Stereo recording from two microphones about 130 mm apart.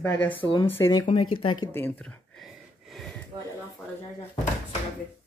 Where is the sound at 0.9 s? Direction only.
40° left (ahead or behind).